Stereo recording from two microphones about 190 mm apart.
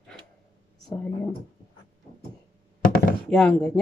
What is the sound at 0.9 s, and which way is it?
Speech, 5° left (ahead or behind).